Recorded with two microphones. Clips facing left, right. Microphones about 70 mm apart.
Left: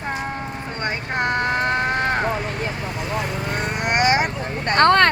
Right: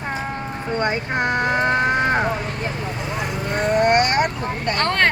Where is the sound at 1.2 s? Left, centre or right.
Centre.